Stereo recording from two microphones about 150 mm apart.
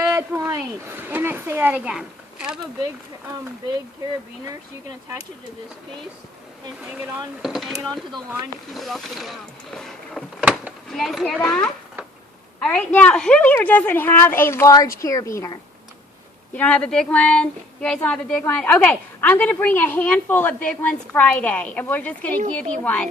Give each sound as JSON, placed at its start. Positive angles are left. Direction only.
{"t": 0.0, "sound": "a sound", "side_deg": -20}
{"t": 1.0, "sound": "speech", "side_deg": -15}
{"t": 6.9, "sound": "speech", "side_deg": -10}
{"t": 7.4, "sound": "a woman's voice", "side_deg": 0}
{"t": 16.6, "sound": "a woman's voice", "side_deg": 10}